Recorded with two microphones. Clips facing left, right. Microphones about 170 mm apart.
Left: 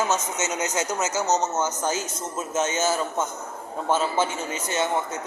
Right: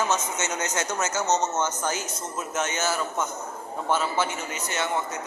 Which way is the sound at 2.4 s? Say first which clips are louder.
Left 4 dB; 25° left (ahead or behind).